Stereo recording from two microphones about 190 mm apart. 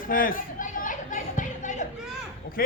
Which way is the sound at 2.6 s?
50° left (ahead or behind).